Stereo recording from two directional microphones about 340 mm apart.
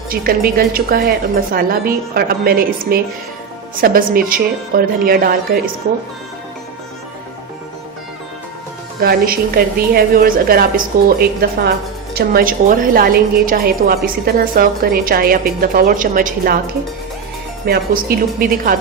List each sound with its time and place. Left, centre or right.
0.1 s a woman's voice: right
9.0 s a woman's voice: right
17.7 s a woman's voice: right